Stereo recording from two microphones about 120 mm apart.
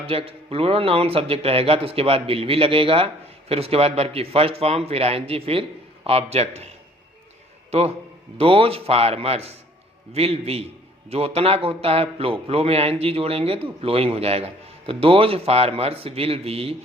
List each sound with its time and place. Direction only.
0.0 s a man's voice: 50° right (ahead or behind)
7.7 s a man's voice: 60° right (ahead or behind)